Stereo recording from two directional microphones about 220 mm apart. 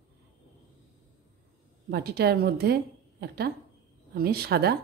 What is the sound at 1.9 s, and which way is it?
Speech, 45° right (ahead or behind).